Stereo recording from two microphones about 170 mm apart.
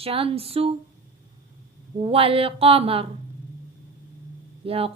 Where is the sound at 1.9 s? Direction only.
35° right (ahead or behind).